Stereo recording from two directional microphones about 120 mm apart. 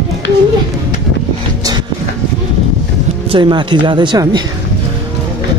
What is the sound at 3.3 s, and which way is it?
Speech, 40° right (ahead or behind).